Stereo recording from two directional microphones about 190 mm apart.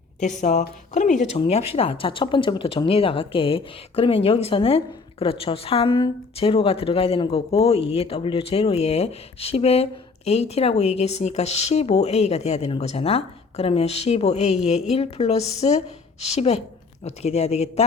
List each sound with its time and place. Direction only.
0.2 s a woman's voice: 40° left (ahead or behind)